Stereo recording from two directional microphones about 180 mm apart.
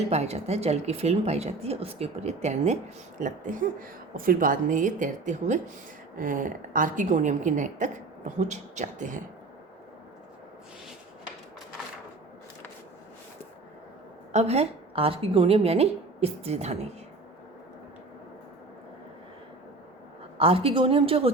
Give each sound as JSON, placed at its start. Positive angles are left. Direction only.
{"t": 0.1, "sound": "a woman's voice", "side_deg": -35}
{"t": 14.3, "sound": "a woman's voice", "side_deg": -35}
{"t": 20.4, "sound": "a woman's voice", "side_deg": -30}